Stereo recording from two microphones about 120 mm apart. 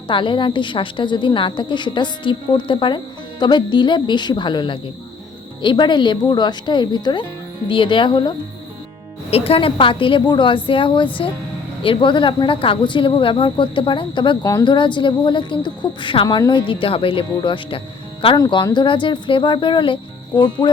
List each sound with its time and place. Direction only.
0.1 s a woman's voice: 45° left (ahead or behind)
9.3 s a woman's voice: 55° left (ahead or behind)
18.3 s a woman's voice: 35° left (ahead or behind)